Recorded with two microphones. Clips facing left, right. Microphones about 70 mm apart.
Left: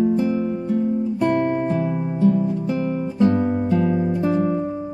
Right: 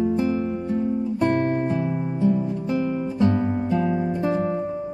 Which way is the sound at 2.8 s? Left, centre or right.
Left.